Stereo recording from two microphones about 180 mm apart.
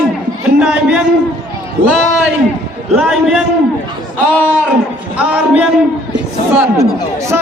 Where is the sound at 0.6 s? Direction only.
5° right (ahead or behind).